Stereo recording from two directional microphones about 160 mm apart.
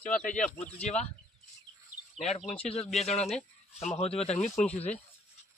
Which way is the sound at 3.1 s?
45° left (ahead or behind).